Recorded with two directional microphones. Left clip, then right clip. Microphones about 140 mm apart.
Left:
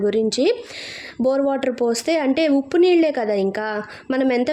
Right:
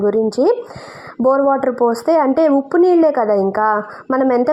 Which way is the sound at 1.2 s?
20° right (ahead or behind).